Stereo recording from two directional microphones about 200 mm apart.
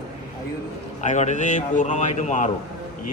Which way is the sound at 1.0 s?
35° left (ahead or behind).